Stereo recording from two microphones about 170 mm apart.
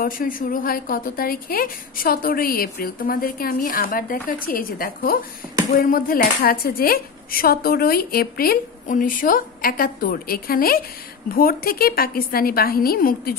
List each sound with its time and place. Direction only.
0.0 s a woman's voice: 55° left (ahead or behind)